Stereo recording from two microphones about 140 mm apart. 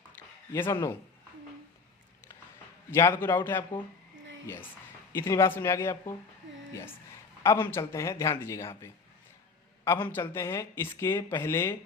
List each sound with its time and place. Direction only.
0.7 s speech: 15° left (ahead or behind)
2.9 s a man's voice: 15° left (ahead or behind)
7.4 s a man's voice: 20° left (ahead or behind)